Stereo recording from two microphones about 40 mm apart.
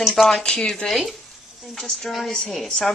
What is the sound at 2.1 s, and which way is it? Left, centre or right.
Speech, centre.